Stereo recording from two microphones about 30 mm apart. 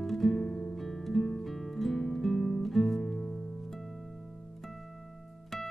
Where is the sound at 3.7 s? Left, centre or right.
Centre.